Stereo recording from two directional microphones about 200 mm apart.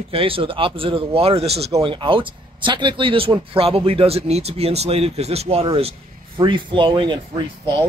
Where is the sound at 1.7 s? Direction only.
20° right (ahead or behind).